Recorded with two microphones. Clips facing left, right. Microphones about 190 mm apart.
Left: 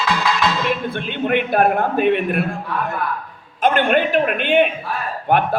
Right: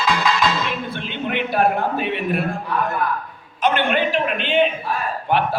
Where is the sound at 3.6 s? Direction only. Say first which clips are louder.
Left 3 dB; 45° left (ahead or behind).